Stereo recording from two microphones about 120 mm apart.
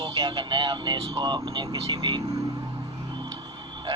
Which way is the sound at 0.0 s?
40° right (ahead or behind).